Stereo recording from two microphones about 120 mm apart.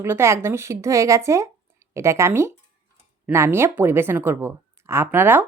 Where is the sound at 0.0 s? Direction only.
20° right (ahead or behind).